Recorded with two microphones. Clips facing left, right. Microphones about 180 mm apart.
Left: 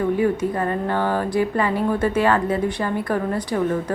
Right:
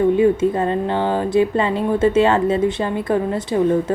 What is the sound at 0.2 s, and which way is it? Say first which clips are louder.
A woman's voice: right 5 dB; 25° right (ahead or behind).